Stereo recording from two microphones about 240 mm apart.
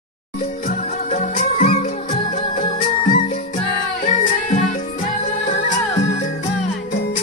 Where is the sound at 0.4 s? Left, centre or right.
Left.